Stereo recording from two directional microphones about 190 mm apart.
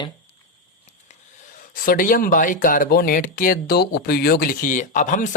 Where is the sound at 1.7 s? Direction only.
45° left (ahead or behind).